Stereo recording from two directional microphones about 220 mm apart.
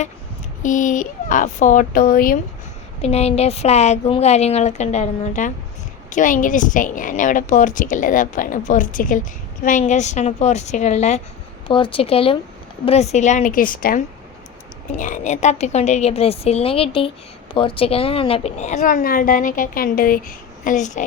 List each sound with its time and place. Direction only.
0.6 s a woman's voice: 35° left (ahead or behind)
3.0 s a woman's voice: 30° left (ahead or behind)
14.9 s a woman's voice: 35° left (ahead or behind)